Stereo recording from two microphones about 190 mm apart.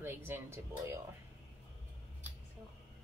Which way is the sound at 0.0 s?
10° right (ahead or behind).